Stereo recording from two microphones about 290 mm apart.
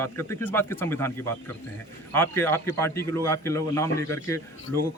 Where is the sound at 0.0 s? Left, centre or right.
Centre.